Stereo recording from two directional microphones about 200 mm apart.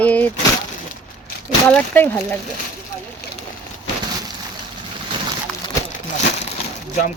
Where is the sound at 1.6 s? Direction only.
5° left (ahead or behind).